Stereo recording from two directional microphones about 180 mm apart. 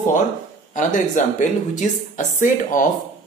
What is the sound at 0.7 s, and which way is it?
Speech, 45° left (ahead or behind).